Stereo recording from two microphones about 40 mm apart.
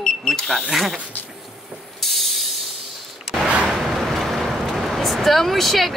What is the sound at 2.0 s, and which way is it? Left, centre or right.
Ratchet, centre.